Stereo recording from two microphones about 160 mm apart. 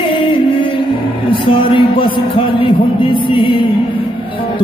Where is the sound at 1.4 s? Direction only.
30° left (ahead or behind).